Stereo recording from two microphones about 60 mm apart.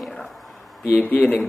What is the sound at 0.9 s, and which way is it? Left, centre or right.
Speech, left.